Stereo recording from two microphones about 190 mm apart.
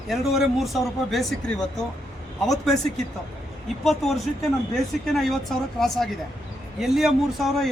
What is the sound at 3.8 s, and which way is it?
A man's voice, centre (ahead or behind).